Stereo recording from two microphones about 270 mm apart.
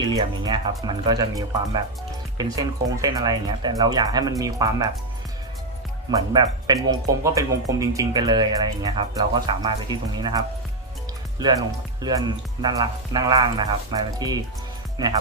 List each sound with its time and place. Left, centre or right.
0.0 s speech: centre
6.1 s speech: centre